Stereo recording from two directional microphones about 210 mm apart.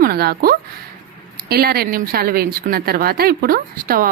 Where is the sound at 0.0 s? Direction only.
45° right (ahead or behind).